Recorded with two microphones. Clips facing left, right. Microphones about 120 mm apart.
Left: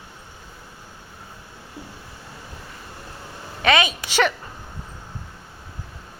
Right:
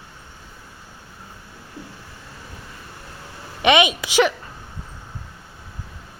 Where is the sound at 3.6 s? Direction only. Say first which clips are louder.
Right 3 dB; 15° right (ahead or behind).